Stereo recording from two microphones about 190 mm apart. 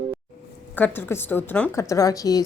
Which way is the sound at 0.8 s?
10° left (ahead or behind).